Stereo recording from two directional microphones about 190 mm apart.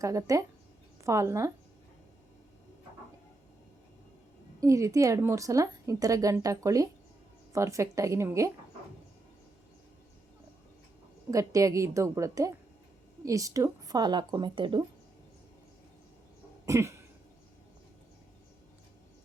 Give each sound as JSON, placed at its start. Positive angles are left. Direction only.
{"t": 0.0, "sound": "a woman's voice", "side_deg": -15}
{"t": 4.6, "sound": "a woman's voice", "side_deg": -15}
{"t": 11.3, "sound": "a woman's voice", "side_deg": -15}
{"t": 16.6, "sound": "throat clearing", "side_deg": -15}